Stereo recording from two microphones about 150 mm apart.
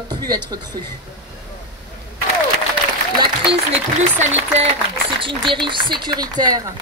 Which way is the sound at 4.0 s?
50° right (ahead or behind).